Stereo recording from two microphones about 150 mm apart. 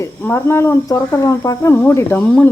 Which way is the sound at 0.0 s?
15° left (ahead or behind).